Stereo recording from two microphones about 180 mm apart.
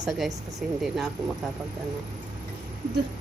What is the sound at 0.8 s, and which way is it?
Speech, centre (ahead or behind).